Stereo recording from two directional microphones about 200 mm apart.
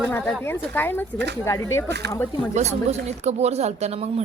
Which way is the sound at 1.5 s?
15° left (ahead or behind).